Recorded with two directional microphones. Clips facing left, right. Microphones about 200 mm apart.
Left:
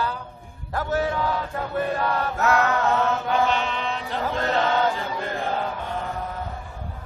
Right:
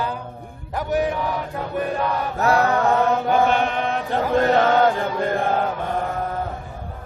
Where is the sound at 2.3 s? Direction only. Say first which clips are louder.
Right 4 dB; 35° right (ahead or behind).